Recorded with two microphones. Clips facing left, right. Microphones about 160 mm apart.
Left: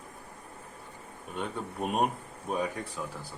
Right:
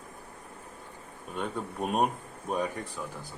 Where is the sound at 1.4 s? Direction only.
Centre (ahead or behind).